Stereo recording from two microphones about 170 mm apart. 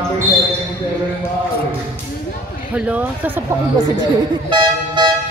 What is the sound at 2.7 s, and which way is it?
Speech, 10° right (ahead or behind).